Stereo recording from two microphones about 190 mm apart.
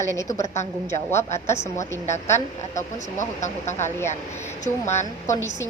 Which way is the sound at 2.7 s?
40° left (ahead or behind).